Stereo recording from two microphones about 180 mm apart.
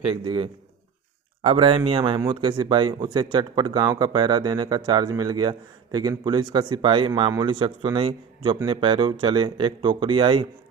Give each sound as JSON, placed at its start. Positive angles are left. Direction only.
{"t": 0.0, "sound": "speech", "side_deg": -30}